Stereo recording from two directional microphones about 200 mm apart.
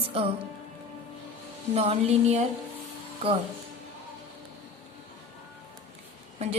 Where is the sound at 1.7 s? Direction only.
30° right (ahead or behind).